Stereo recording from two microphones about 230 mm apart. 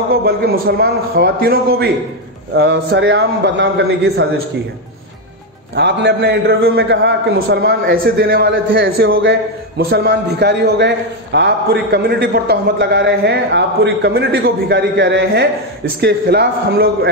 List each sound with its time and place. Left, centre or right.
0.1 s a man's voice: right
5.8 s a man's voice: right